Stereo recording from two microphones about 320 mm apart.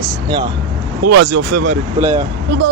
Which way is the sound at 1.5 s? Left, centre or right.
Right.